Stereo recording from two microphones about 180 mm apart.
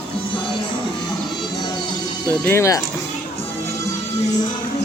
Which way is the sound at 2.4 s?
15° left (ahead or behind).